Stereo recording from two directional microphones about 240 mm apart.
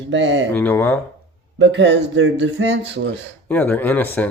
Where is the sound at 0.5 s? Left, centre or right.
Centre.